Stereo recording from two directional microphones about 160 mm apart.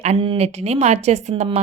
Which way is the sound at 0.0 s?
40° right (ahead or behind).